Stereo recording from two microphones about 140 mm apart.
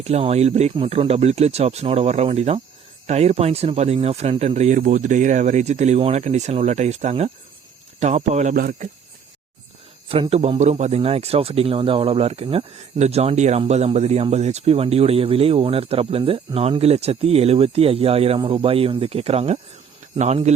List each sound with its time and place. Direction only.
0.0 s speech: 45° right (ahead or behind)
8.5 s speech: 90° right
10.1 s speech: 45° right (ahead or behind)